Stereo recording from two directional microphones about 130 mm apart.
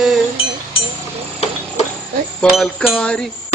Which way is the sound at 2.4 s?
5° left (ahead or behind).